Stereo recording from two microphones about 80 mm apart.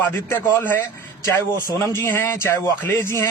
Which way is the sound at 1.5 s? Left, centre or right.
Right.